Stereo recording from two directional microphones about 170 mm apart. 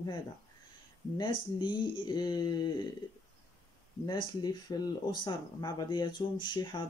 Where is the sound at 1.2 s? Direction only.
25° left (ahead or behind).